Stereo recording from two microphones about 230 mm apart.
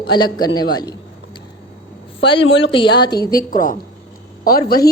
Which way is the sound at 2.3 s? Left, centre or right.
Left.